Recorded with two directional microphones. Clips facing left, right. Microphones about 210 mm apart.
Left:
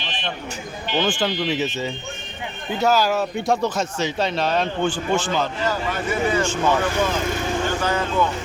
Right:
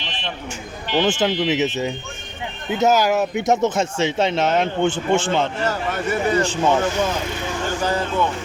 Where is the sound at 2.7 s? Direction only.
20° right (ahead or behind).